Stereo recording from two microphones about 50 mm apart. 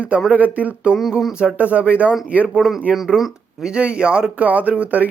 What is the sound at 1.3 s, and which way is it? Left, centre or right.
Speech, centre.